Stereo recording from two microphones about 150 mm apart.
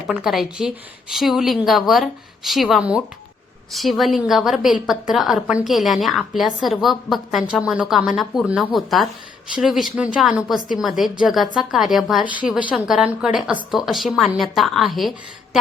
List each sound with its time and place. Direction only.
0.1 s a woman's voice: 5° right (ahead or behind)